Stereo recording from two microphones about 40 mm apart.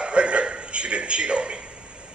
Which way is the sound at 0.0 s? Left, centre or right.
Right.